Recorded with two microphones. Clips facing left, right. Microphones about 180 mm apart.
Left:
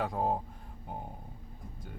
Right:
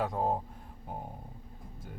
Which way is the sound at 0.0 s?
Centre (ahead or behind).